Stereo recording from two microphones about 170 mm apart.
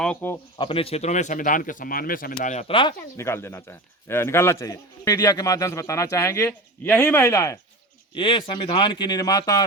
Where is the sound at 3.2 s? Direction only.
15° left (ahead or behind).